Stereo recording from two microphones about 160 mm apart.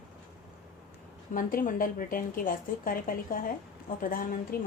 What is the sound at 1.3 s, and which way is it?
A woman's voice, 60° left (ahead or behind).